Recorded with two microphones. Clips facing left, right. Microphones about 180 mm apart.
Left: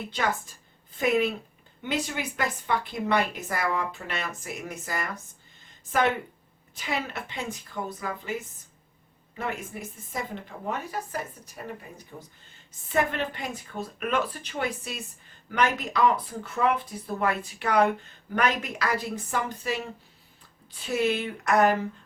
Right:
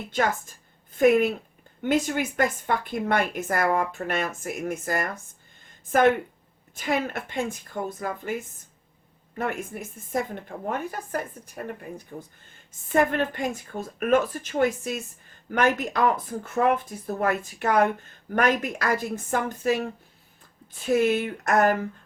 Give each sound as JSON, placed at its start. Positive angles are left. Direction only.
{"t": 0.1, "sound": "a woman's voice", "side_deg": -50}
{"t": 9.4, "sound": "a woman's voice", "side_deg": -50}